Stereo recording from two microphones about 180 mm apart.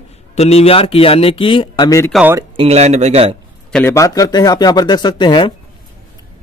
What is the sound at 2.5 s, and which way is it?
Speech, 35° right (ahead or behind).